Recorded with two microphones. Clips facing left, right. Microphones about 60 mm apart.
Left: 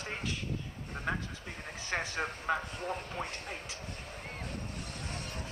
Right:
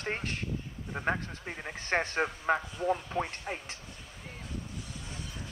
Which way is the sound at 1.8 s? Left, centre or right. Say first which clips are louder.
Right 5 dB; right.